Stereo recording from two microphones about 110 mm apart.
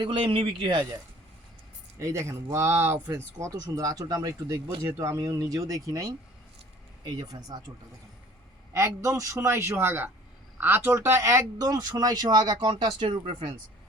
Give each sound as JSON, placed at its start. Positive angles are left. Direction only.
{"t": 0.0, "sound": "speech", "side_deg": -50}
{"t": 2.0, "sound": "a man's voice", "side_deg": -25}
{"t": 3.4, "sound": "speech", "side_deg": -30}
{"t": 8.7, "sound": "a man's voice", "side_deg": -30}